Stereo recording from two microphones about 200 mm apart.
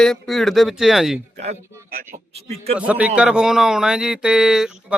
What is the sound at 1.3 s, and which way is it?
Speech, 35° right (ahead or behind).